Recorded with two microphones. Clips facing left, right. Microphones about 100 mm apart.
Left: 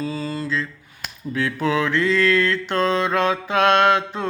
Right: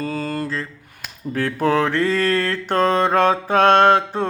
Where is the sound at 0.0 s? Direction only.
50° right (ahead or behind).